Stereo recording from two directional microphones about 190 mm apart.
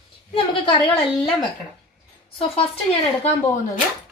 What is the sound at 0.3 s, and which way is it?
Speech, 25° left (ahead or behind).